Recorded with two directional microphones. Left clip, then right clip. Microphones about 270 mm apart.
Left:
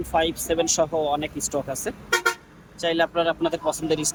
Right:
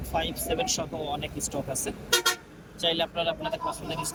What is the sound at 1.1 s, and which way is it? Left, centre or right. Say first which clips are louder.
Speech: left 7 dB; centre.